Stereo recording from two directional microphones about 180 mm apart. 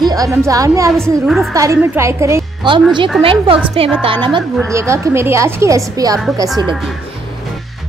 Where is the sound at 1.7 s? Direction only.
15° right (ahead or behind).